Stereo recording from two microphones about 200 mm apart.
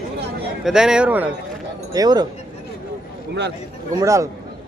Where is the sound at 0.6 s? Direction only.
5° right (ahead or behind).